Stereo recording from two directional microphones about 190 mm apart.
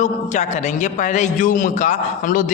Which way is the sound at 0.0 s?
40° left (ahead or behind).